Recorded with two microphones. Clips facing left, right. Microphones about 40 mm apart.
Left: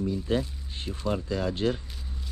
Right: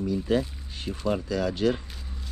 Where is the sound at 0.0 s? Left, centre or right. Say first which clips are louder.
Right 2 dB; right.